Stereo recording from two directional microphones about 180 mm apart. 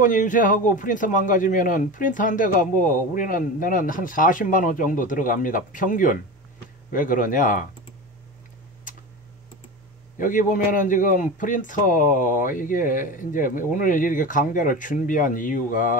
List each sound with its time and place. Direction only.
0.0 s a man's voice: 45° left (ahead or behind)
10.1 s a man's voice: 50° left (ahead or behind)